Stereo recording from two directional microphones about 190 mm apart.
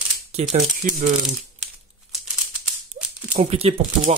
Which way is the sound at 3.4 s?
30° right (ahead or behind).